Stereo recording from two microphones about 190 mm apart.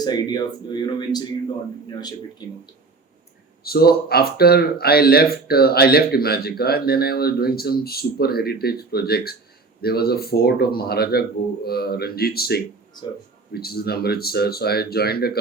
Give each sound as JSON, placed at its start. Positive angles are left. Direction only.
{"t": 0.0, "sound": "speech", "side_deg": 20}
{"t": 3.6, "sound": "speech", "side_deg": 55}